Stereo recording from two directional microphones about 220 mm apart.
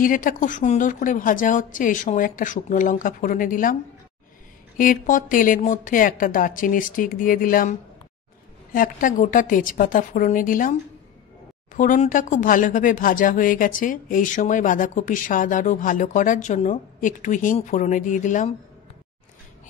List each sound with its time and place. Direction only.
0.0 s speech: 40° left (ahead or behind)
4.7 s speech: 40° left (ahead or behind)
8.7 s speech: 40° left (ahead or behind)